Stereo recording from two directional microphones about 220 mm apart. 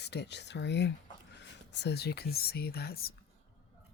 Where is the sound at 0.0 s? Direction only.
50° left (ahead or behind).